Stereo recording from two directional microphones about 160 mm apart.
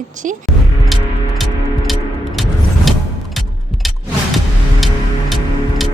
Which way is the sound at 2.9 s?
Centre (ahead or behind).